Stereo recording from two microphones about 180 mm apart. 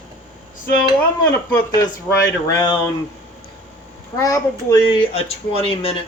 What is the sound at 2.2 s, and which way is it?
Speech, 20° left (ahead or behind).